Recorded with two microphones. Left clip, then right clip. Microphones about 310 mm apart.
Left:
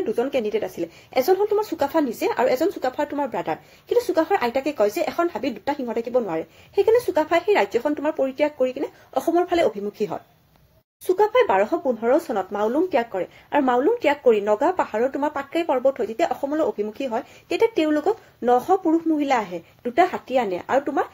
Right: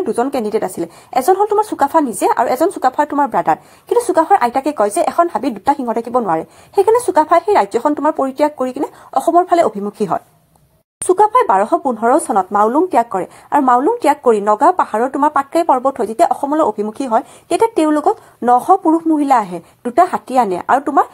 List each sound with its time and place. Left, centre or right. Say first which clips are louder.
0.1 s speech: right 6 dB; right
0.4 s a woman's voice: right 6 dB; right
0.7 s a woman's voice: right 5 dB; centre